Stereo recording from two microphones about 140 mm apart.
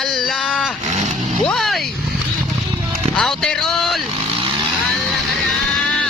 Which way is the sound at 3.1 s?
5° left (ahead or behind).